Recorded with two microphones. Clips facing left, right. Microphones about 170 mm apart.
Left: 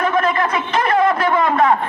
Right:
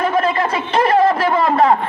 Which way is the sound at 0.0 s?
30° right (ahead or behind).